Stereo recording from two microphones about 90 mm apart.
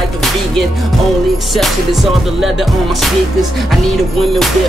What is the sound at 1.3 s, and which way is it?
Music, centre (ahead or behind).